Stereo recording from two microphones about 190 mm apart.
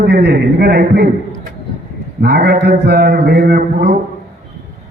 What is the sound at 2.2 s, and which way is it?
A man's voice, 60° right (ahead or behind).